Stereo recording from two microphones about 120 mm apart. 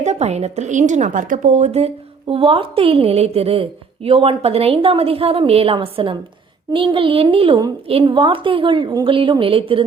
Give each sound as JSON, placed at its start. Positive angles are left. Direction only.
{"t": 0.0, "sound": "a woman's voice", "side_deg": -70}
{"t": 2.2, "sound": "a woman's voice", "side_deg": -50}